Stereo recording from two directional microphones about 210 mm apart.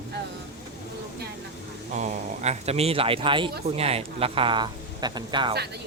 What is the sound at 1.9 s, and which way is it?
Speech, 35° right (ahead or behind).